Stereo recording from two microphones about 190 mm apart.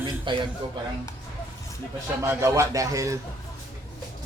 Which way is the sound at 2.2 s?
15° right (ahead or behind).